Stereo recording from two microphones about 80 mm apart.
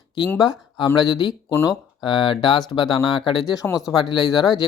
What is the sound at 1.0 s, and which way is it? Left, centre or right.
Speech, left.